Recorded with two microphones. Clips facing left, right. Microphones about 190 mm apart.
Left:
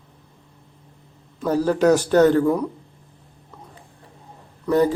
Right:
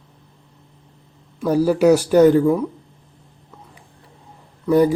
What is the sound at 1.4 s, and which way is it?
A man's voice, 10° right (ahead or behind).